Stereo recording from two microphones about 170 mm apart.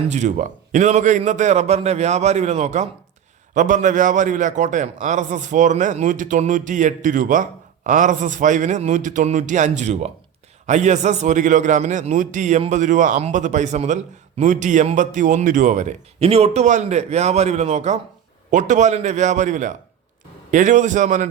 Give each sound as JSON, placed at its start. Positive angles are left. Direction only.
{"t": 0.1, "sound": "a man's voice", "side_deg": -45}